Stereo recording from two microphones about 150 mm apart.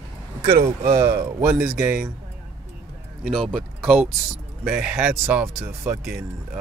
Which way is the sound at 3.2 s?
5° right (ahead or behind).